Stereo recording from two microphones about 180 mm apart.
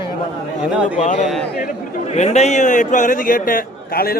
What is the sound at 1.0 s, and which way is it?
A man's voice, 40° left (ahead or behind).